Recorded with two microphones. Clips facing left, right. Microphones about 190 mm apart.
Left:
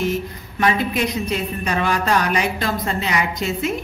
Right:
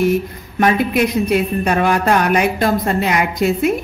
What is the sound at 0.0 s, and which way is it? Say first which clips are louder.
Speech: right 6 dB; 50° right (ahead or behind).